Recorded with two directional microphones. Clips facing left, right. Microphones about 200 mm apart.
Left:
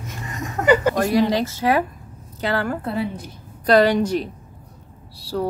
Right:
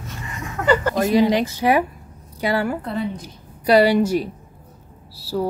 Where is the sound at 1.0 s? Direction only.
15° right (ahead or behind).